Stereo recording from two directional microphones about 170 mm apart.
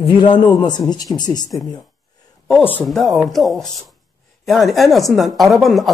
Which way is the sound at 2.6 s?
5° left (ahead or behind).